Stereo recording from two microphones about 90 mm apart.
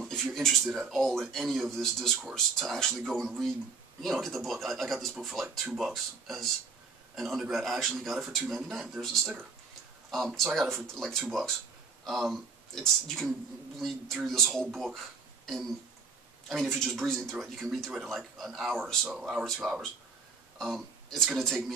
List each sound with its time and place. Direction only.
0.0 s speech: 5° left (ahead or behind)
15.4 s a sound: 5° left (ahead or behind)
16.4 s speech: centre (ahead or behind)